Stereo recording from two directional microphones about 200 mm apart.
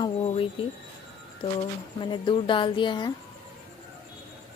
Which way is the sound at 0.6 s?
25° left (ahead or behind).